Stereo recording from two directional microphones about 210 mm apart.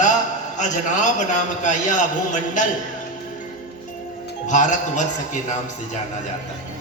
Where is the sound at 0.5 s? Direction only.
35° left (ahead or behind).